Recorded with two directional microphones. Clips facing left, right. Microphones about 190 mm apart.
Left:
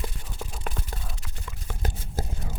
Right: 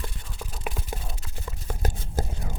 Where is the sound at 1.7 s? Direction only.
45° right (ahead or behind).